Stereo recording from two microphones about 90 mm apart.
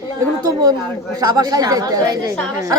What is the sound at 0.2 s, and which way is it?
A woman's voice, 45° right (ahead or behind).